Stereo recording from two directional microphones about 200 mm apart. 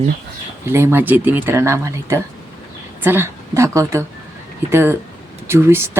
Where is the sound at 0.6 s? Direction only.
15° right (ahead or behind).